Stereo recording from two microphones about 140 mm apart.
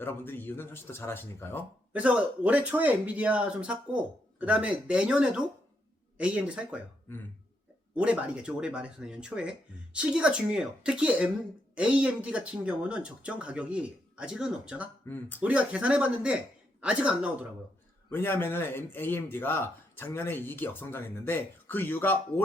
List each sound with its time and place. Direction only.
0.0 s speech: 15° left (ahead or behind)
1.9 s speech: 10° right (ahead or behind)
7.9 s speech: 10° right (ahead or behind)
15.0 s speech: 15° left (ahead or behind)
15.4 s speech: 10° right (ahead or behind)
18.1 s speech: 15° left (ahead or behind)